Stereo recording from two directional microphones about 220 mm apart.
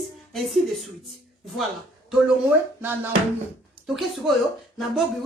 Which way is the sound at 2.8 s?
10° right (ahead or behind).